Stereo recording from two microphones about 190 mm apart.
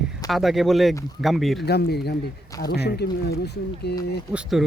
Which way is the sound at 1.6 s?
60° left (ahead or behind).